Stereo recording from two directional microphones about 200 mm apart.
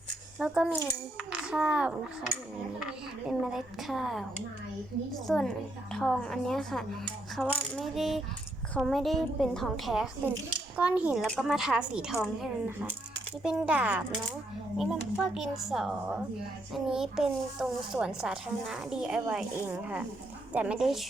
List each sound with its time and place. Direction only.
0.3 s a child's voice: 5° right (ahead or behind)
3.2 s a child's voice: 5° right (ahead or behind)